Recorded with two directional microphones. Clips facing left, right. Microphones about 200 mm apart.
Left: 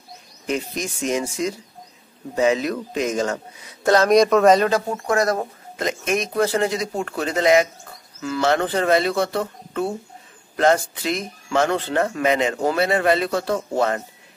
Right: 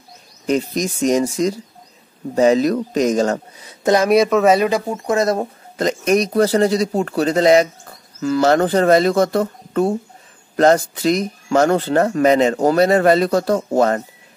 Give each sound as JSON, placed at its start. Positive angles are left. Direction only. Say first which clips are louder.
{"t": 0.5, "sound": "speech", "louder": "right 7 dB", "side_deg": -35}
{"t": 3.8, "sound": "speech", "louder": "right 1 dB", "side_deg": -10}
{"t": 5.8, "sound": "speech", "louder": "right 7 dB", "side_deg": -40}